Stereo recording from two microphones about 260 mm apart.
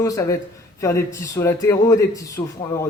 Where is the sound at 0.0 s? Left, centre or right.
Centre.